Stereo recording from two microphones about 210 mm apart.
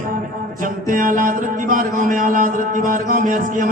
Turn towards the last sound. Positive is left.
turn(degrees=-40)  # may be behind; listen again after turning